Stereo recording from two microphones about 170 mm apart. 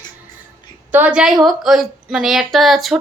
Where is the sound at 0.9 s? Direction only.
10° right (ahead or behind).